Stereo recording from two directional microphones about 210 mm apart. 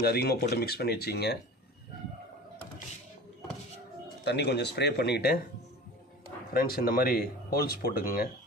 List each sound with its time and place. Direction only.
0.0 s speech: 50° left (ahead or behind)
4.2 s speech: 55° left (ahead or behind)
6.5 s speech: 45° left (ahead or behind)